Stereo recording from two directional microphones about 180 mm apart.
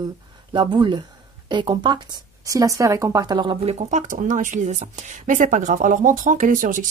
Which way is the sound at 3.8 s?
40° right (ahead or behind).